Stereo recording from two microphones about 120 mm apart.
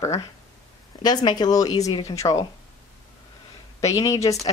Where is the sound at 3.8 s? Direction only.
30° left (ahead or behind).